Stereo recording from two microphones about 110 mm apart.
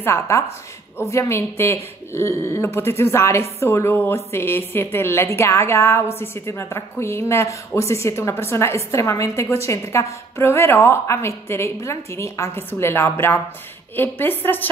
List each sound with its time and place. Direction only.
0.0 s a woman's voice: 25° left (ahead or behind)